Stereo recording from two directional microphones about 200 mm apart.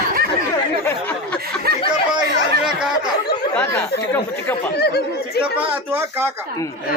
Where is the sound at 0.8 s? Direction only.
10° left (ahead or behind).